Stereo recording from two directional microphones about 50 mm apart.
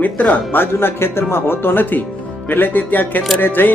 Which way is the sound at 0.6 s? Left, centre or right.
Left.